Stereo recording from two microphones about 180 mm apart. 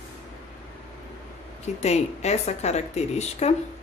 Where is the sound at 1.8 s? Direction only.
40° left (ahead or behind).